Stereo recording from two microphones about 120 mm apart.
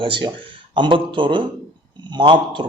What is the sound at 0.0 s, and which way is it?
Speech, 45° right (ahead or behind).